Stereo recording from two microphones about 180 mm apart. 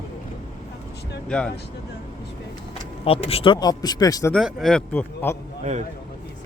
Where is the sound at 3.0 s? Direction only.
30° left (ahead or behind).